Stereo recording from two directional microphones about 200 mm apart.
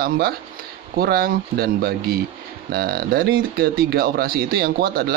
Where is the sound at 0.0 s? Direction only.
50° right (ahead or behind).